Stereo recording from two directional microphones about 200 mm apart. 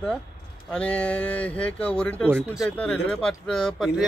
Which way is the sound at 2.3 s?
5° right (ahead or behind).